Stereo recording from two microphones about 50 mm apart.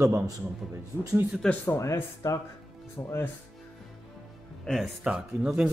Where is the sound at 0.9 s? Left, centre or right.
Right.